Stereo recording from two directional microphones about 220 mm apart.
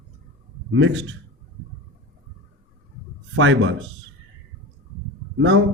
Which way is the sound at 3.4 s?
60° right (ahead or behind).